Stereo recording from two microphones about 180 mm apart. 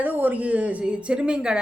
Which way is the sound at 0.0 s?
10° right (ahead or behind).